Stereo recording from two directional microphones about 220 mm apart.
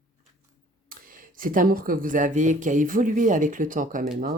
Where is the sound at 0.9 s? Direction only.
40° right (ahead or behind).